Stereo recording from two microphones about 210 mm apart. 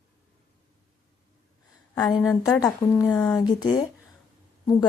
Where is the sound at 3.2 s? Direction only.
20° left (ahead or behind).